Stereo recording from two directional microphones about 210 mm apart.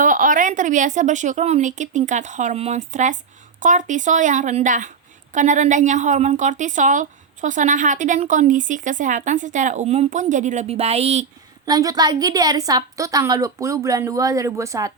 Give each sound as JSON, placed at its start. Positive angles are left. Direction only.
{"t": 0.0, "sound": "a woman's voice", "side_deg": -40}
{"t": 11.6, "sound": "a woman's voice", "side_deg": -15}